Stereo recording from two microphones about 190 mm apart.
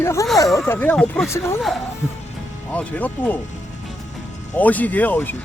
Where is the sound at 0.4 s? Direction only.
Centre (ahead or behind).